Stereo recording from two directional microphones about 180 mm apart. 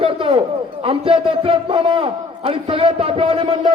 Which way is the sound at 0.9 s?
30° right (ahead or behind).